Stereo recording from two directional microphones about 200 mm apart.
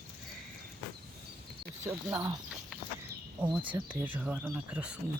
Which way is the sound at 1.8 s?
10° right (ahead or behind).